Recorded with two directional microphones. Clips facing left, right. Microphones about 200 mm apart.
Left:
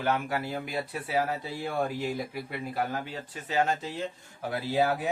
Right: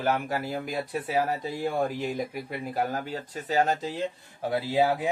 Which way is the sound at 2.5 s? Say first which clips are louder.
Right 1 dB; 40° right (ahead or behind).